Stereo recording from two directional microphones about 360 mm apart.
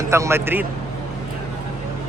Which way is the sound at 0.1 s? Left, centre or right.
Centre.